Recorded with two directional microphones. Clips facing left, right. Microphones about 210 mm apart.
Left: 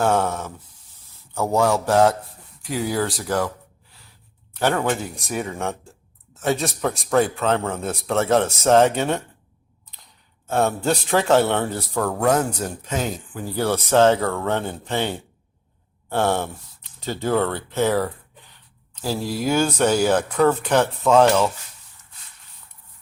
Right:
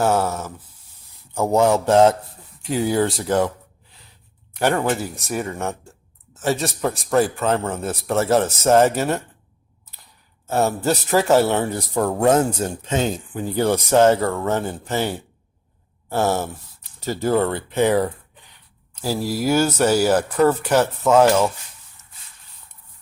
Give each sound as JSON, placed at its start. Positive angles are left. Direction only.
{"t": 0.0, "sound": "speech", "side_deg": -5}
{"t": 1.3, "sound": "speech", "side_deg": -15}
{"t": 4.5, "sound": "speech", "side_deg": -10}
{"t": 10.4, "sound": "speech", "side_deg": -5}